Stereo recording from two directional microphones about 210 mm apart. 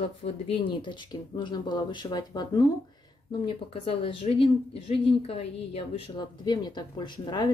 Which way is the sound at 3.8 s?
25° left (ahead or behind).